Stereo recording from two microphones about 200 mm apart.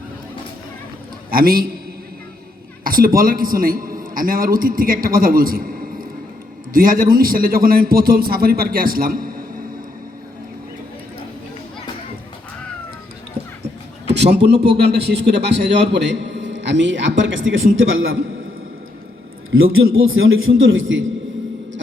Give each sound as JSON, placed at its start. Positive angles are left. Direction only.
{"t": 1.3, "sound": "a man's voice", "side_deg": -45}
{"t": 2.8, "sound": "a man's voice", "side_deg": -45}
{"t": 14.1, "sound": "a man's voice", "side_deg": -55}
{"t": 19.5, "sound": "a man's voice", "side_deg": -90}
{"t": 20.6, "sound": "a man's voice", "side_deg": -75}